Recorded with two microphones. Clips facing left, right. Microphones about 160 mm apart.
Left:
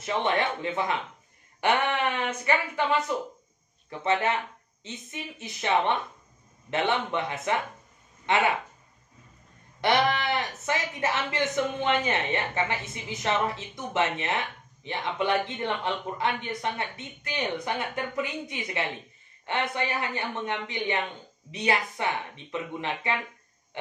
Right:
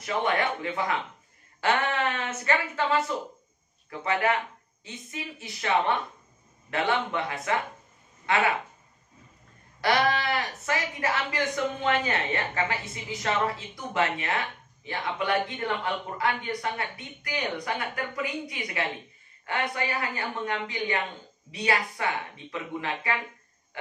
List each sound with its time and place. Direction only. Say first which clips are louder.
0.0 s speech: even; 25° left (ahead or behind)
6.7 s speech: even; 20° left (ahead or behind)
9.8 s speech: left 1 dB; 20° left (ahead or behind)